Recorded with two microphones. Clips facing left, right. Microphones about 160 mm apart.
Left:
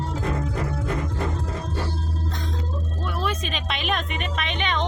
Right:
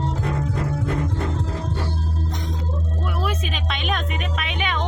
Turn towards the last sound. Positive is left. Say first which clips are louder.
# even
turn(degrees=-5)  # may be behind; listen again after turning